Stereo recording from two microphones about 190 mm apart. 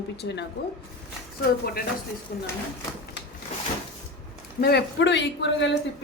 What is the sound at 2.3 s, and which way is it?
Speech, 50° left (ahead or behind).